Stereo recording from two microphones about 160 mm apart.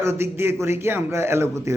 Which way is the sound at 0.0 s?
15° right (ahead or behind).